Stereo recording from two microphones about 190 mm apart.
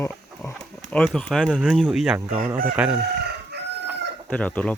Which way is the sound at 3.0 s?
60° right (ahead or behind).